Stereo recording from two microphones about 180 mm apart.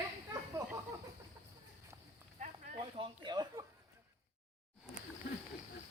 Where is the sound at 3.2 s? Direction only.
25° right (ahead or behind).